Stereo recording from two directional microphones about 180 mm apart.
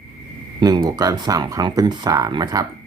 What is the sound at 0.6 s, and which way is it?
Speech, 20° right (ahead or behind).